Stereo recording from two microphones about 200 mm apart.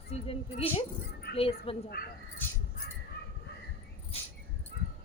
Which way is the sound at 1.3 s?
55° left (ahead or behind).